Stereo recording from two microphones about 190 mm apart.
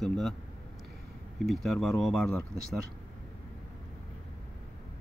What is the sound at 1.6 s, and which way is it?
Speech, centre (ahead or behind).